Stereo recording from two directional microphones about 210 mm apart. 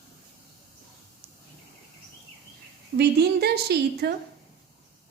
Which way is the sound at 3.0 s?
50° right (ahead or behind).